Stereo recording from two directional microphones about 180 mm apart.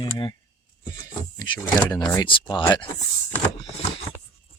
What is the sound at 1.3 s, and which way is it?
Speech, 25° left (ahead or behind).